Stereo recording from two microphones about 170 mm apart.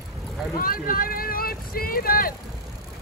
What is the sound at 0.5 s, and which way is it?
Speech, 55° left (ahead or behind).